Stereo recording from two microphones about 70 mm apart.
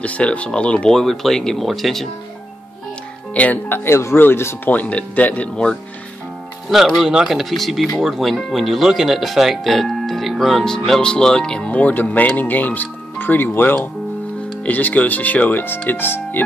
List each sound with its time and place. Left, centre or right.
0.0 s speech: centre
0.9 s speech: centre
3.3 s speech: left
4.6 s speech: left
7.0 s speech: centre
11.7 s speech: left